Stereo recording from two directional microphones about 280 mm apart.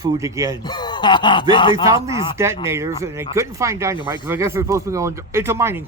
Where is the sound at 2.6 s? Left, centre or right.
Centre.